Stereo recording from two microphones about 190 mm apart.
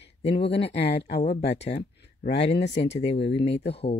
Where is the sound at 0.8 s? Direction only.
60° left (ahead or behind).